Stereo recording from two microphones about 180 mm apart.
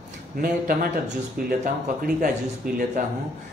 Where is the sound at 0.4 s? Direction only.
55° right (ahead or behind).